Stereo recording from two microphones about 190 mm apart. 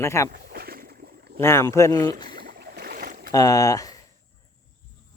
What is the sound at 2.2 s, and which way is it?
Boat, 50° right (ahead or behind).